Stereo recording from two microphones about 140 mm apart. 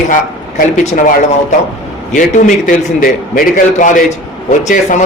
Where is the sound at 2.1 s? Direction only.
65° left (ahead or behind).